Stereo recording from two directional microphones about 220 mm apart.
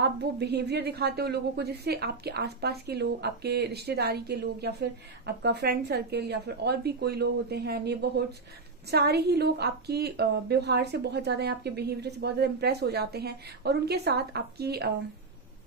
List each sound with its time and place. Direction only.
0.0 s a woman's voice: 50° right (ahead or behind)